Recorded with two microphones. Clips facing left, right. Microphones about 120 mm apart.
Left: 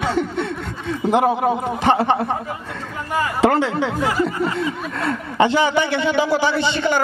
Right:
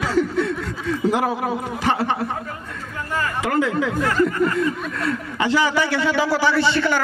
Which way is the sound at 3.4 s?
30° left (ahead or behind).